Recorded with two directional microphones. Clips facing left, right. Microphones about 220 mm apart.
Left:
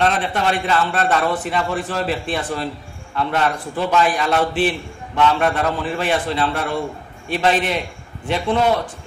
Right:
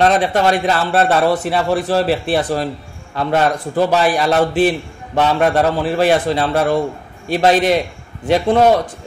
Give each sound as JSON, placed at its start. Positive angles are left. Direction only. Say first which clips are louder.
{"t": 0.0, "sound": "a man's voice", "louder": "right 6 dB", "side_deg": -40}